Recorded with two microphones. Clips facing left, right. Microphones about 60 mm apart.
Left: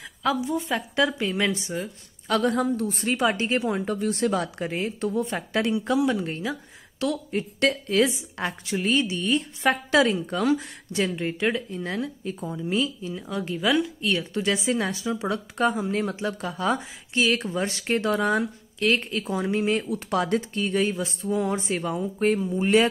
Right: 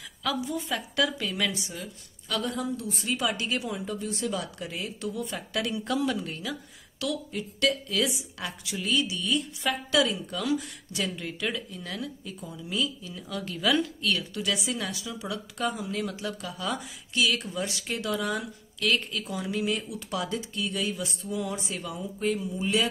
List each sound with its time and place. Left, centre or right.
0.2 s a woman's voice: left
6.2 s a woman's voice: left
20.1 s a woman's voice: left